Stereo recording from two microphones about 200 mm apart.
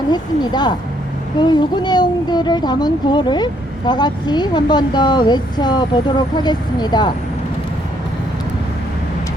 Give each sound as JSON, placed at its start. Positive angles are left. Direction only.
{"t": 0.1, "sound": "speech", "side_deg": 20}